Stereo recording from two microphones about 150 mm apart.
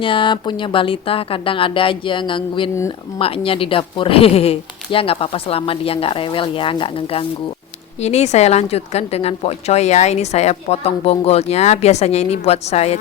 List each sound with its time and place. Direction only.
0.0 s a woman's voice: 35° left (ahead or behind)
8.0 s a woman's voice: 50° left (ahead or behind)